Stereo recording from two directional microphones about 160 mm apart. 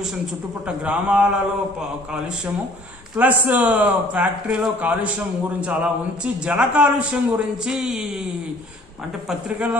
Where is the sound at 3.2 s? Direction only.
10° right (ahead or behind).